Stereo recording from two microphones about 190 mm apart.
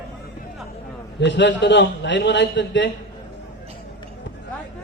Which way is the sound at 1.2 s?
70° left (ahead or behind).